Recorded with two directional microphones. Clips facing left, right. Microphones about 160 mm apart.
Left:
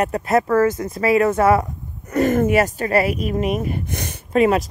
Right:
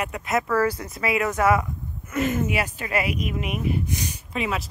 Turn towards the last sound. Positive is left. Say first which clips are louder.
# left 12 dB
turn(degrees=50)  # may be behind; listen again after turning